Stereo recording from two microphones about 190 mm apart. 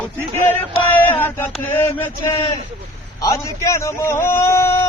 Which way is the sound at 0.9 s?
10° left (ahead or behind).